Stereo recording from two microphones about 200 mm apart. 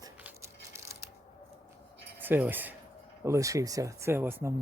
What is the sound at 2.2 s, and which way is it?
Speech, 10° right (ahead or behind).